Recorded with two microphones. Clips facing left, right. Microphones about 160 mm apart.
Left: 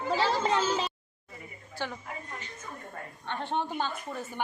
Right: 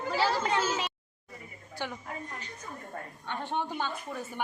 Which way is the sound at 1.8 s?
15° right (ahead or behind).